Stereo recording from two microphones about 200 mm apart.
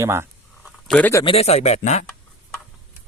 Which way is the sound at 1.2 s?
30° left (ahead or behind).